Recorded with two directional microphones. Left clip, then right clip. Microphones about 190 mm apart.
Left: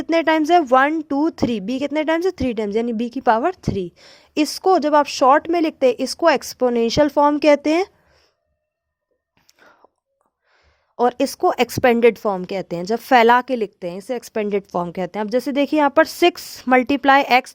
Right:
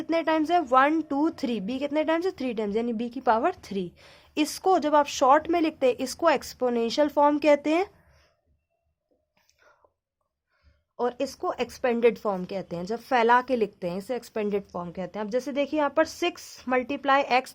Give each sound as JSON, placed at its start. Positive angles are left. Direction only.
{"t": 0.0, "sound": "a woman's voice", "side_deg": 40}
{"t": 9.5, "sound": "whispering", "side_deg": 45}
{"t": 10.9, "sound": "a woman's voice", "side_deg": 50}
{"t": 14.8, "sound": "speech", "side_deg": 50}